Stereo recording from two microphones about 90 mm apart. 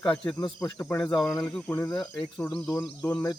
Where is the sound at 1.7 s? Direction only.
25° left (ahead or behind).